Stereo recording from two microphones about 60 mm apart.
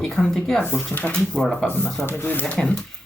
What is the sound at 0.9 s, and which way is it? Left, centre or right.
Speech, left.